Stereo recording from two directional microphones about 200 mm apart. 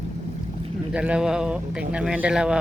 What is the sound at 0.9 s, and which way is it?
Speech, 5° right (ahead or behind).